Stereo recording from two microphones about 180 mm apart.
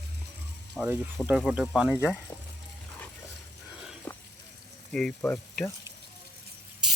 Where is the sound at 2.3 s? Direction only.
20° left (ahead or behind).